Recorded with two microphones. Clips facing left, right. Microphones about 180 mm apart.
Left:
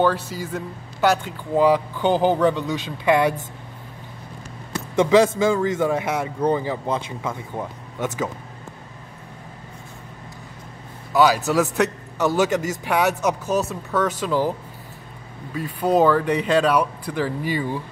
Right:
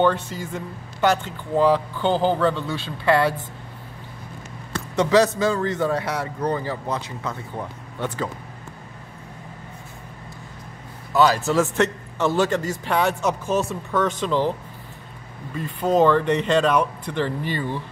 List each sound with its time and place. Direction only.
0.0 s speech: 5° left (ahead or behind)
4.7 s a sound: 10° left (ahead or behind)
5.5 s speech: 10° left (ahead or behind)
6.0 s speech: 20° left (ahead or behind)
11.1 s a man's voice: 10° left (ahead or behind)
15.5 s speech: 5° left (ahead or behind)